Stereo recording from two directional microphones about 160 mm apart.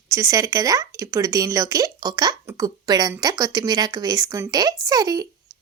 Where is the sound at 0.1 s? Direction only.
20° right (ahead or behind).